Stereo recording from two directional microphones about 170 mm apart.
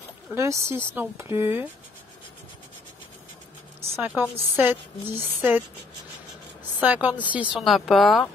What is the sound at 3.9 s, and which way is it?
Speech, 10° right (ahead or behind).